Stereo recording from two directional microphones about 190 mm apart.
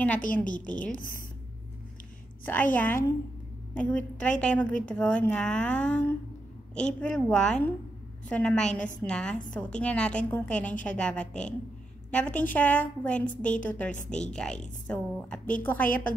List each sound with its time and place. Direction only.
0.9 s speech: 45° left (ahead or behind)
2.4 s a woman's voice: 10° left (ahead or behind)